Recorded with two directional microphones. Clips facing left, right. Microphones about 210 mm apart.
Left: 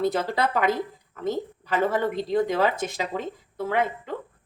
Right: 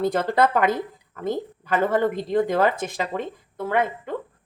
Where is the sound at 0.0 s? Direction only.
50° right (ahead or behind).